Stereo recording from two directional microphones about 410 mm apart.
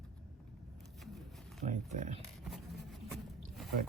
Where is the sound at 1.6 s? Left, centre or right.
Centre.